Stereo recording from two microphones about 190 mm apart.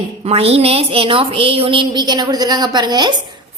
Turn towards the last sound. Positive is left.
turn(degrees=-25)  # may be behind; listen again after turning